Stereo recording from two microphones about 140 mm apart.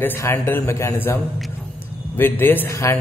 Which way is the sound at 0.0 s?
15° left (ahead or behind).